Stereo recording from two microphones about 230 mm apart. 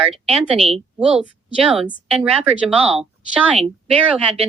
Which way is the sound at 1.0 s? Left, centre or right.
Centre.